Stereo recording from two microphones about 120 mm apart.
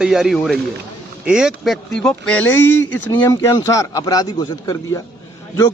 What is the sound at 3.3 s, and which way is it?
Speech, 25° left (ahead or behind).